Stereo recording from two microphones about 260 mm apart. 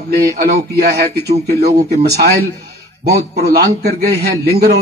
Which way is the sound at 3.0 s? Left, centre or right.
Right.